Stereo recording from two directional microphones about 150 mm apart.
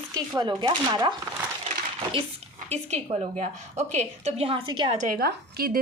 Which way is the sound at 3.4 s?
50° right (ahead or behind).